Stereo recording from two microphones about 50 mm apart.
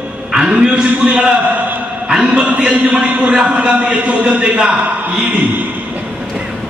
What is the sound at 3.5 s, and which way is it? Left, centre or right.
A man's voice, right.